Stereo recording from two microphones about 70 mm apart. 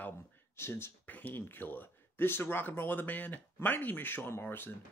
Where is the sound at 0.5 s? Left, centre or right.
Left.